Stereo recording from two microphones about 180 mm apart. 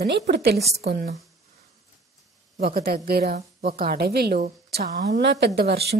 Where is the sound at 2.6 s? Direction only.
55° right (ahead or behind).